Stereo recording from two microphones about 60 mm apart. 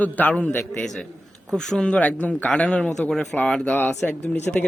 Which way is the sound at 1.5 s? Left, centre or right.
Centre.